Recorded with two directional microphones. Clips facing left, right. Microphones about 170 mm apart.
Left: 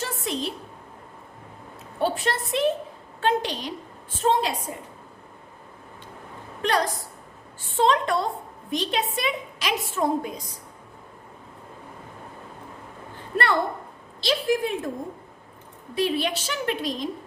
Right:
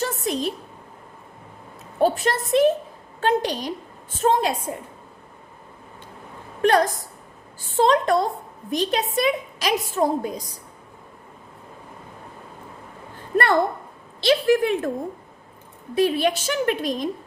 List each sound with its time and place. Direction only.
0.0 s a sound: 45° right (ahead or behind)
2.0 s a woman's voice: 40° right (ahead or behind)
6.6 s a woman's voice: 50° right (ahead or behind)
7.8 s a woman's voice: 40° right (ahead or behind)
13.3 s a sound: 45° right (ahead or behind)
14.2 s speech: 65° right (ahead or behind)
16.0 s a woman's voice: 45° right (ahead or behind)